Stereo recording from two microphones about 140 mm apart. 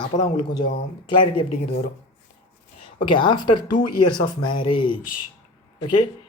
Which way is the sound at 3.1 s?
35° left (ahead or behind).